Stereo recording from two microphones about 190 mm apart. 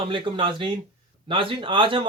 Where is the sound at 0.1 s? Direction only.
25° right (ahead or behind).